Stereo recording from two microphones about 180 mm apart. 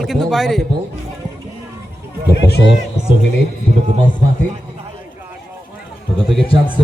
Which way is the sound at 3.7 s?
40° right (ahead or behind).